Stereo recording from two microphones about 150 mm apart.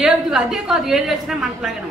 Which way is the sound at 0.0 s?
5° right (ahead or behind).